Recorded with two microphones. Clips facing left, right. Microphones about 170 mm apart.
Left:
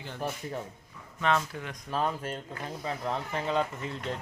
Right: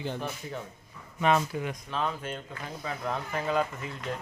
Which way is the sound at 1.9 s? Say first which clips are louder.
Left 2 dB; 40° left (ahead or behind).